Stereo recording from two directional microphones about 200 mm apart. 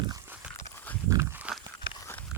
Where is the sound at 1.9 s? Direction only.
15° left (ahead or behind).